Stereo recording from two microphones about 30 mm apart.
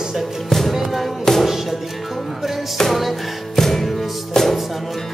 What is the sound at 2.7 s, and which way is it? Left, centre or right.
Music, centre.